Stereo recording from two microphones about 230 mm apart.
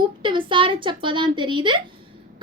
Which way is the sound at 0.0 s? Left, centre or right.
Right.